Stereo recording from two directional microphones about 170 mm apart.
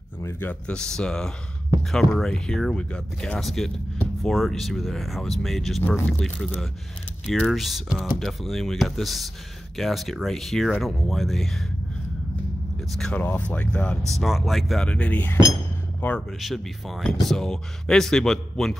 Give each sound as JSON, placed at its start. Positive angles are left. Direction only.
{"t": 0.2, "sound": "speech", "side_deg": 10}
{"t": 12.9, "sound": "speech", "side_deg": 5}